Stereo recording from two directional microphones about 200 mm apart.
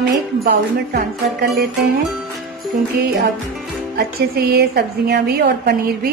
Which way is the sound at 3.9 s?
50° right (ahead or behind).